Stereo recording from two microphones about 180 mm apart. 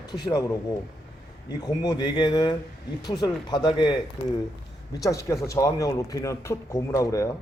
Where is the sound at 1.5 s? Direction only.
20° left (ahead or behind).